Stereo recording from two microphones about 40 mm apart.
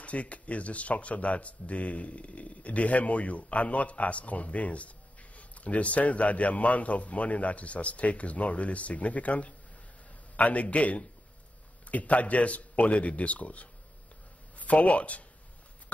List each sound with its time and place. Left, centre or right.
0.0 s speech: left